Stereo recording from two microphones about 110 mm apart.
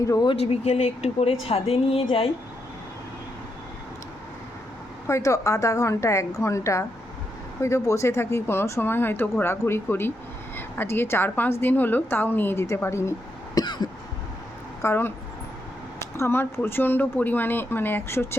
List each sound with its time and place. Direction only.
0.0 s speech: 30° left (ahead or behind)
0.3 s a woman's voice: 70° left (ahead or behind)
5.0 s speech: 30° left (ahead or behind)
13.6 s cough: 40° left (ahead or behind)
14.8 s speech: 20° left (ahead or behind)